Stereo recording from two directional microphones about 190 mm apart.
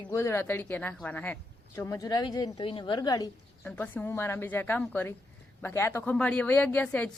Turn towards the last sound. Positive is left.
turn(degrees=5)  # may be behind; listen again after turning